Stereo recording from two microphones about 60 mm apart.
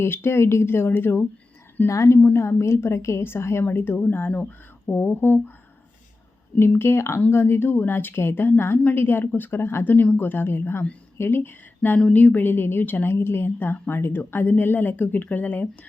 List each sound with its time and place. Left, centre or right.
0.0 s a woman's voice: left
1.9 s a woman's voice: left
2.1 s a woman's voice: left
6.6 s a woman's voice: left
8.8 s a woman's voice: left
9.0 s a woman's voice: left